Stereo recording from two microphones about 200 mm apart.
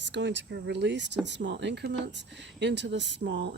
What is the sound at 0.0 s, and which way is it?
Speech, 65° right (ahead or behind).